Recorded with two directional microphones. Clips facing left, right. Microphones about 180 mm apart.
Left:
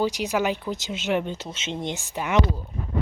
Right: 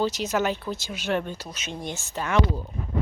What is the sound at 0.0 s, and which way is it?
Speech, 15° left (ahead or behind).